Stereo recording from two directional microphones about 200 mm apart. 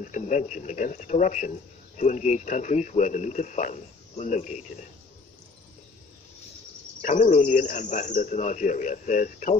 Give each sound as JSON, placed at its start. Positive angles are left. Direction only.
{"t": 0.0, "sound": "speech", "side_deg": 40}
{"t": 7.0, "sound": "speech", "side_deg": 40}